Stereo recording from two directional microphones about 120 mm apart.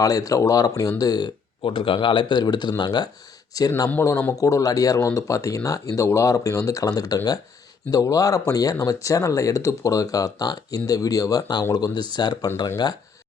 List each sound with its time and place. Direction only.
0.0 s speech: 30° left (ahead or behind)
1.6 s speech: 45° left (ahead or behind)